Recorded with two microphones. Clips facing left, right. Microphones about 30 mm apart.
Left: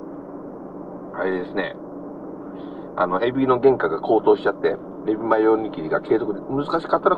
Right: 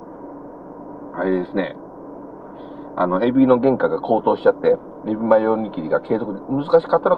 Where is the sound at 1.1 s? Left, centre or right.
Centre.